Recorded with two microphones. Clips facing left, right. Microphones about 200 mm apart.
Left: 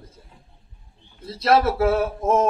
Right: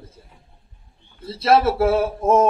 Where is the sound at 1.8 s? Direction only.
30° right (ahead or behind).